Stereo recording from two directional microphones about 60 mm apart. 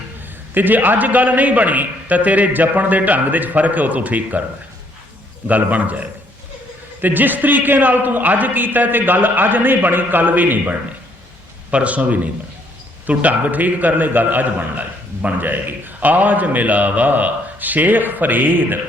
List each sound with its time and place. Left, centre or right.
0.5 s a man's voice: right
5.5 s a man's voice: right